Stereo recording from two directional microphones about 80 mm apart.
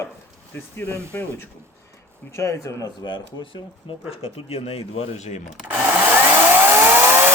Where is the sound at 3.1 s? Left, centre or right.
Left.